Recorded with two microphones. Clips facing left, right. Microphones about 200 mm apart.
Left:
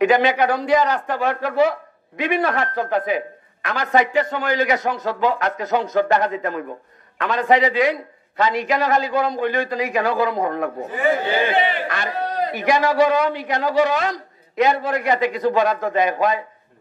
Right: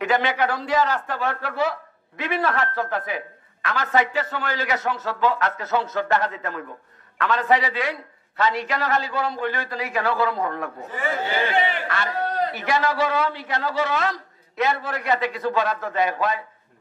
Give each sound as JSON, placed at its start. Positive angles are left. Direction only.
{"t": 0.0, "sound": "a man's voice", "side_deg": 15}